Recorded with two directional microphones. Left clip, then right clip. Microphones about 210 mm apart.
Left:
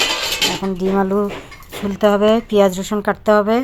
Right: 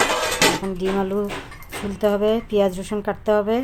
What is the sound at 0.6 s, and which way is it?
Speech, 15° left (ahead or behind).